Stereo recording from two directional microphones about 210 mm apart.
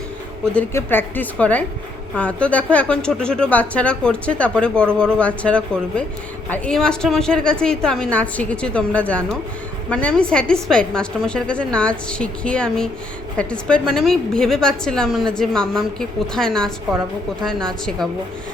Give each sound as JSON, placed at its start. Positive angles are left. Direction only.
{"t": 0.5, "sound": "a woman's voice", "side_deg": 10}